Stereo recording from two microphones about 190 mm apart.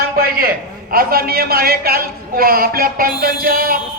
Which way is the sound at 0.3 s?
50° right (ahead or behind).